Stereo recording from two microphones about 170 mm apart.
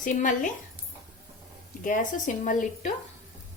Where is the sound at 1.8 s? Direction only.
50° left (ahead or behind).